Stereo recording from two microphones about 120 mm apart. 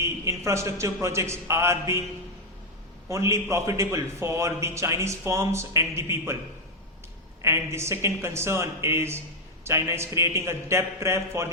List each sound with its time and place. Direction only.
0.0 s a man's voice: 25° right (ahead or behind)
3.1 s a man's voice: 25° right (ahead or behind)
7.4 s a man's voice: 20° right (ahead or behind)